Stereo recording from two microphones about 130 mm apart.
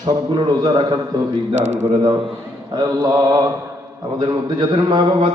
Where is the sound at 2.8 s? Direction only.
30° right (ahead or behind).